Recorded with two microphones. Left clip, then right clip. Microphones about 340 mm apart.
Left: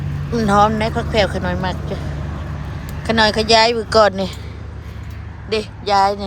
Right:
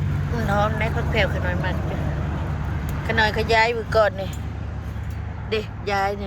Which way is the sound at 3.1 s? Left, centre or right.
Centre.